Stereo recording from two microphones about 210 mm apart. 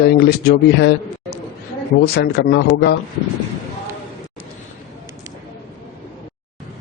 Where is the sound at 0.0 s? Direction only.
50° left (ahead or behind).